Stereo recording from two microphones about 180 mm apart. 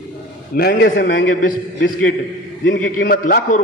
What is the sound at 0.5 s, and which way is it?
Speech, 60° left (ahead or behind).